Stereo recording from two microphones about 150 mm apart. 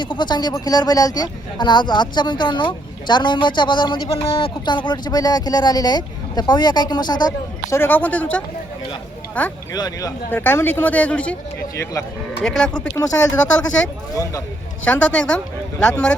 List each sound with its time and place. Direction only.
0.0 s speech: 30° left (ahead or behind)
7.8 s speech: 10° left (ahead or behind)
9.7 s speech: 25° left (ahead or behind)
10.3 s speech: 15° left (ahead or behind)
11.7 s speech: 20° left (ahead or behind)
12.4 s speech: 5° left (ahead or behind)
14.1 s speech: 20° left (ahead or behind)
14.8 s speech: 5° left (ahead or behind)